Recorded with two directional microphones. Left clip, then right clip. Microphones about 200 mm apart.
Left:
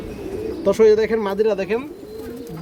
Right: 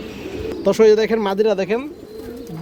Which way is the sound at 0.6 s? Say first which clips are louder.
Right 1 dB; 35° right (ahead or behind).